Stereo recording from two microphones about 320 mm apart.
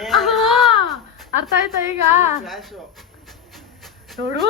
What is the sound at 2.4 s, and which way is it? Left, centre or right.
Speech, centre.